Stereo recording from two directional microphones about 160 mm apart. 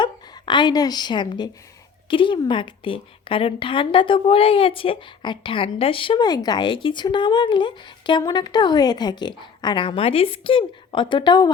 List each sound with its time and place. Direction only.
0.0 s a woman's voice: 30° left (ahead or behind)